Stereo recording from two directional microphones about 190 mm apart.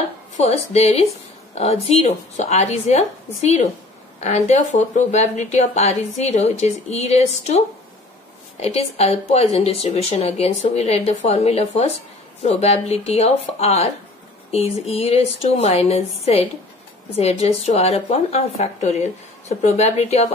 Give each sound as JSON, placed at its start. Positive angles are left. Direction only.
{"t": 0.4, "sound": "speech", "side_deg": 35}